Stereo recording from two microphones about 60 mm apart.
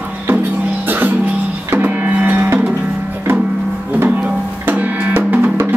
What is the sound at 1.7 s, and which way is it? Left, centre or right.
Music, right.